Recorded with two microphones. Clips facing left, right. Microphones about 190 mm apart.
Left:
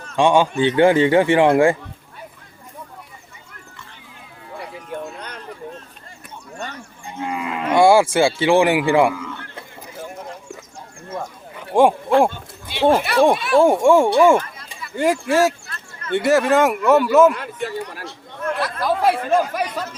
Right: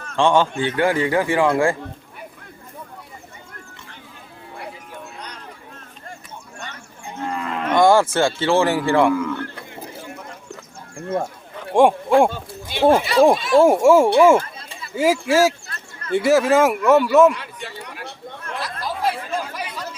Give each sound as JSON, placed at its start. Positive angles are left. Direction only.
{"t": 0.2, "sound": "speech", "side_deg": 15}
{"t": 0.8, "sound": "speech", "side_deg": 25}
{"t": 7.2, "sound": "moo", "side_deg": 10}
{"t": 8.9, "sound": "speech", "side_deg": 10}
{"t": 9.1, "sound": "a sound", "side_deg": -50}
{"t": 11.7, "sound": "speech", "side_deg": 0}
{"t": 12.7, "sound": "a sound", "side_deg": -45}
{"t": 13.3, "sound": "speech", "side_deg": 60}
{"t": 13.6, "sound": "speech", "side_deg": -5}
{"t": 17.3, "sound": "a sound", "side_deg": 50}
{"t": 18.6, "sound": "chatter", "side_deg": 60}